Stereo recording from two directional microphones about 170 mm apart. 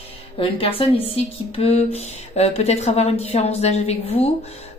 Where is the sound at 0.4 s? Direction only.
35° left (ahead or behind).